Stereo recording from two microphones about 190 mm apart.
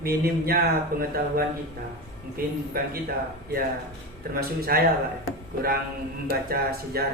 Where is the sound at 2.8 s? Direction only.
50° right (ahead or behind).